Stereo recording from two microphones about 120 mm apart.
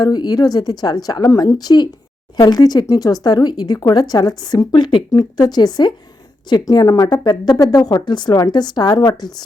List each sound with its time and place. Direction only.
0.0 s speech: 35° left (ahead or behind)